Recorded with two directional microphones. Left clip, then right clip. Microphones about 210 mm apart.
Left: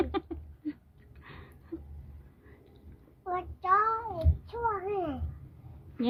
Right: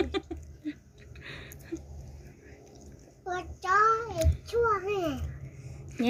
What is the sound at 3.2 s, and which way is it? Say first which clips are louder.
Child singing: left 1 dB; 30° left (ahead or behind).